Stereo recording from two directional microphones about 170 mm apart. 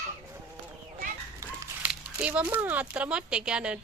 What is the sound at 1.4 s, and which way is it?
Chicken, 15° right (ahead or behind).